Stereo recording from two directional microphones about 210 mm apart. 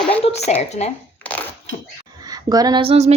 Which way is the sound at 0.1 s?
30° left (ahead or behind).